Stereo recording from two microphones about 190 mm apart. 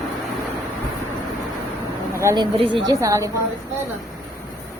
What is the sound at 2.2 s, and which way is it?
A woman's voice, 20° right (ahead or behind).